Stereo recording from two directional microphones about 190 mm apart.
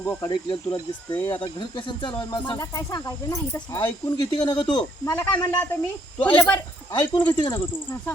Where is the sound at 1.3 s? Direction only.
25° left (ahead or behind).